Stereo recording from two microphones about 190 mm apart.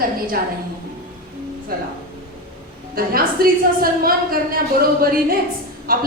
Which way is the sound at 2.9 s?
50° right (ahead or behind).